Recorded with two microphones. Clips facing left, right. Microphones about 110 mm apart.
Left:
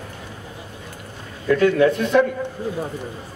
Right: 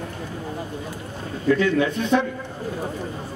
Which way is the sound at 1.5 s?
50° left (ahead or behind).